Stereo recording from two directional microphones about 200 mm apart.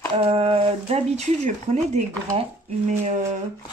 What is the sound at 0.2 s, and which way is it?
Speech, 30° right (ahead or behind).